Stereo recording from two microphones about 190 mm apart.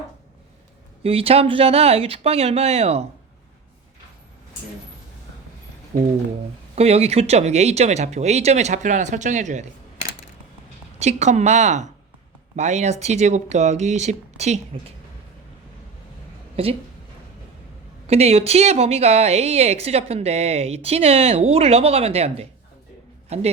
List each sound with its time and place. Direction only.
1.0 s a woman's voice: 30° right (ahead or behind)
6.7 s a woman's voice: 35° right (ahead or behind)
11.0 s a woman's voice: 35° right (ahead or behind)
16.6 s a woman's voice: 30° right (ahead or behind)
18.0 s a woman's voice: 35° right (ahead or behind)